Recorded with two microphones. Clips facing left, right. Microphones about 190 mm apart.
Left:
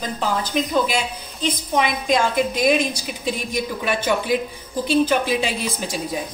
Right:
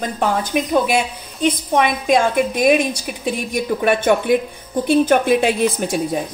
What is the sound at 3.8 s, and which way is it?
A woman's voice, 55° right (ahead or behind).